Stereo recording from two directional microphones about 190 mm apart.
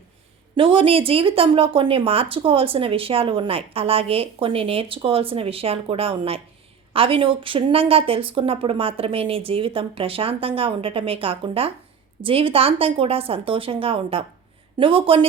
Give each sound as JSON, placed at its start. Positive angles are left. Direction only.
{"t": 0.5, "sound": "a woman's voice", "side_deg": -25}